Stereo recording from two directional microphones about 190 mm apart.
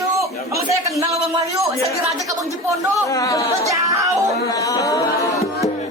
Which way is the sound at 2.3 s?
15° right (ahead or behind).